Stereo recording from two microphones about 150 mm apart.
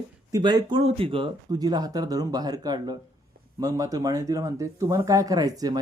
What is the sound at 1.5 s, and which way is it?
Speech, 25° right (ahead or behind).